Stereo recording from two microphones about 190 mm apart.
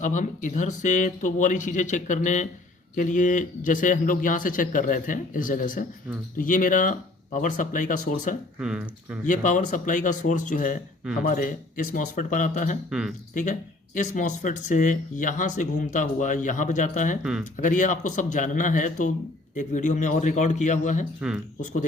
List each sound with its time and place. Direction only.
0.0 s a man's voice: 40° left (ahead or behind)
8.5 s speech: 5° right (ahead or behind)
9.2 s a man's voice: 45° left (ahead or behind)
12.9 s speech: 5° right (ahead or behind)
13.3 s speech: 40° left (ahead or behind)
21.2 s speech: 5° right (ahead or behind)